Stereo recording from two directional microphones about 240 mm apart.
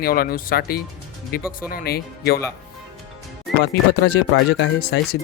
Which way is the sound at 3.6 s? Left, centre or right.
Left.